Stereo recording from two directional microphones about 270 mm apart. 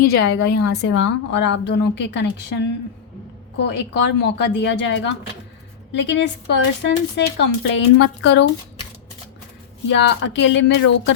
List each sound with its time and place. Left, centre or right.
0.2 s a woman's voice: left
0.7 s speech: left
9.9 s speech: left